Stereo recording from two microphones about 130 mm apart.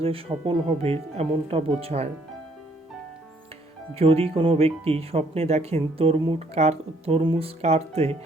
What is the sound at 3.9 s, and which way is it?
Speech, 50° right (ahead or behind).